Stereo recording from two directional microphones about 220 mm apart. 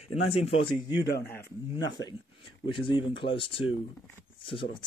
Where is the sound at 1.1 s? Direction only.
45° left (ahead or behind).